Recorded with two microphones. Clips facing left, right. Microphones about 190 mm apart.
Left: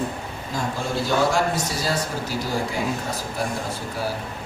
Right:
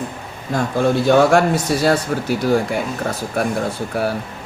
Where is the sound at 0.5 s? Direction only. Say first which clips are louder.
Right 9 dB; 60° right (ahead or behind).